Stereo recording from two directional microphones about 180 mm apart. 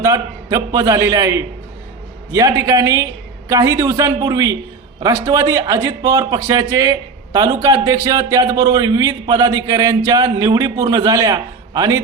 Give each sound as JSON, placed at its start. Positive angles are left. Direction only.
{"t": 0.0, "sound": "a man's voice", "side_deg": -20}